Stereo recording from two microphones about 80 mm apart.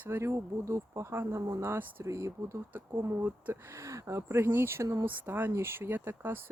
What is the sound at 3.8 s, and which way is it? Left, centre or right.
Speech, right.